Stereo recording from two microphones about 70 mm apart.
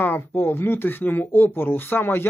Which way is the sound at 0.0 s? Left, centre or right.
Left.